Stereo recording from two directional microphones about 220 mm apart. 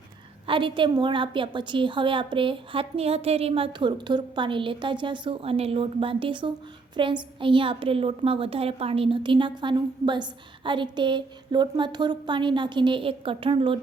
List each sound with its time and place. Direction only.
0.4 s a woman's voice: 20° right (ahead or behind)